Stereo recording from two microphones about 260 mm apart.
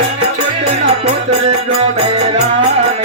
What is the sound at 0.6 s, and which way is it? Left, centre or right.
Music, right.